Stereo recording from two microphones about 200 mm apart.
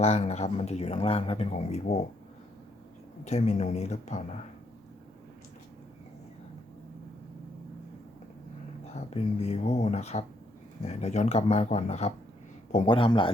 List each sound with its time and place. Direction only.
0.0 s speech: 30° left (ahead or behind)
3.2 s speech: 35° left (ahead or behind)
8.9 s a man's voice: 30° left (ahead or behind)